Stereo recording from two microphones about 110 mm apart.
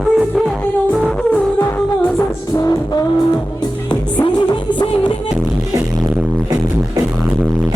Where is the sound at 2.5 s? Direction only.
25° left (ahead or behind).